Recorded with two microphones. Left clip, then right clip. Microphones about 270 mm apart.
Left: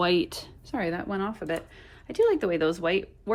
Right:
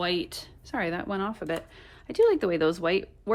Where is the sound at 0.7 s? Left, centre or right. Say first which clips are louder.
Even; right.